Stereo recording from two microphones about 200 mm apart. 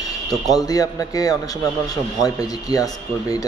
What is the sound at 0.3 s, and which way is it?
A man's voice, 20° left (ahead or behind).